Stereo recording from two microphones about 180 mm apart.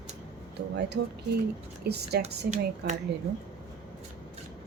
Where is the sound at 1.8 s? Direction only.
65° right (ahead or behind).